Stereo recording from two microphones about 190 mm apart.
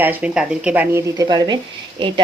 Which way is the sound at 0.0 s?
10° right (ahead or behind).